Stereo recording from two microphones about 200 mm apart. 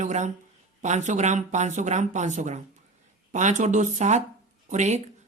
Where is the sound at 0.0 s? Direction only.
35° right (ahead or behind).